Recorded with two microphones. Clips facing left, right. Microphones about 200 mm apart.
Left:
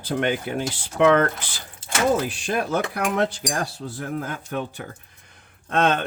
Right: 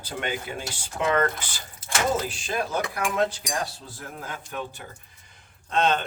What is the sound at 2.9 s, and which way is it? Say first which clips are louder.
Cutlery: left 2 dB; 65° left (ahead or behind).